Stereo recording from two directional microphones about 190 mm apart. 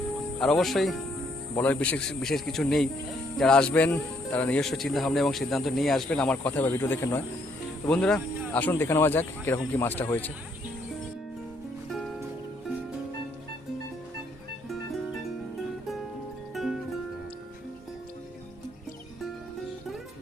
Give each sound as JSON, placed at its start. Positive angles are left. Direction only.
{"t": 0.3, "sound": "speech", "side_deg": 5}